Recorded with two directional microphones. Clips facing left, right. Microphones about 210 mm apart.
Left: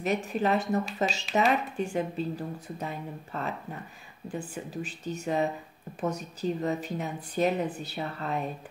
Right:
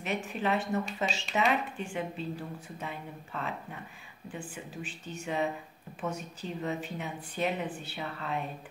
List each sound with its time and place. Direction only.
0.0 s speech: 40° left (ahead or behind)